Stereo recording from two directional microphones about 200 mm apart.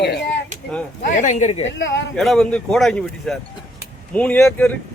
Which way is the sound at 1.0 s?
40° left (ahead or behind).